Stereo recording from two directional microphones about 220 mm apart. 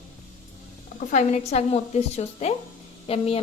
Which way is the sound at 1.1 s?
30° left (ahead or behind).